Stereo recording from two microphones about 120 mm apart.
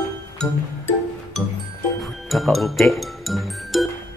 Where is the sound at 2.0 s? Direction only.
Centre (ahead or behind).